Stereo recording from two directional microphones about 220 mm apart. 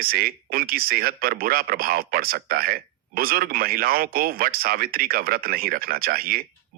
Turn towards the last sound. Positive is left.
turn(degrees=-40)  # may be behind; listen again after turning